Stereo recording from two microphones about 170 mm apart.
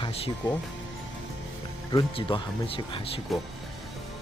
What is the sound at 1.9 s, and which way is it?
Speech, 25° left (ahead or behind).